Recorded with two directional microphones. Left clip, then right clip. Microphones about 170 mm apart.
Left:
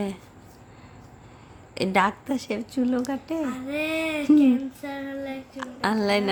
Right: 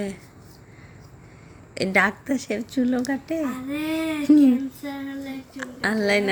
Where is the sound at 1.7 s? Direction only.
5° left (ahead or behind).